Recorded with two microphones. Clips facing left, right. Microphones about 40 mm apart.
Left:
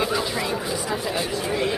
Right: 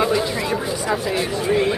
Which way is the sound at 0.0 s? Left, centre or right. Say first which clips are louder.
Right 4 dB; centre.